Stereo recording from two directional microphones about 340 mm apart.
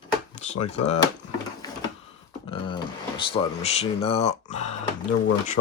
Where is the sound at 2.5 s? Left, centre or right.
Centre.